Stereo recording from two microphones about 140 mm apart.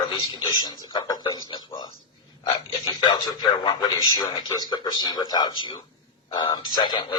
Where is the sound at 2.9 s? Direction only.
30° left (ahead or behind).